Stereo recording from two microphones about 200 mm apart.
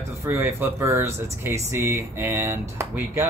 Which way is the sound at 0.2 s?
15° right (ahead or behind).